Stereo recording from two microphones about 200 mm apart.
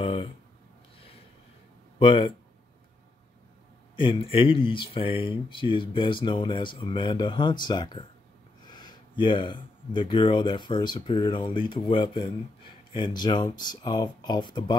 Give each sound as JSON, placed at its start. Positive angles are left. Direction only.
{"t": 0.0, "sound": "a sound", "side_deg": 30}
{"t": 2.0, "sound": "speech", "side_deg": 25}
{"t": 3.9, "sound": "speech", "side_deg": 25}